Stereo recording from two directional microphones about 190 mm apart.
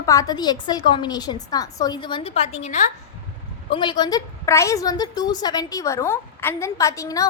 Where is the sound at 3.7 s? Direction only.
25° left (ahead or behind).